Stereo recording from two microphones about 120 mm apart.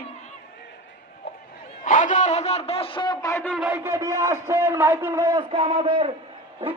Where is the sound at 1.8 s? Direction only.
90° left; by 3.1 s 45° left (ahead or behind).